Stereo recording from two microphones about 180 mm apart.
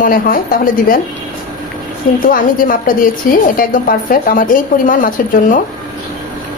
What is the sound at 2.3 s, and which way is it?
A woman's voice, 50° left (ahead or behind).